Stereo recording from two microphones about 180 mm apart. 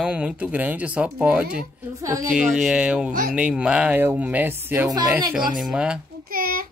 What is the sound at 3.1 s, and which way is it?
Speech, 50° right (ahead or behind).